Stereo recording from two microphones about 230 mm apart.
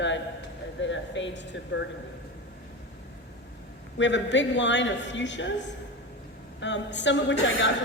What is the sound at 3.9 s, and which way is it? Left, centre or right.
A woman's voice, left.